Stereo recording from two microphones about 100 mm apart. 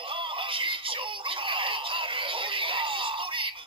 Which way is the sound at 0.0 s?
60° right (ahead or behind).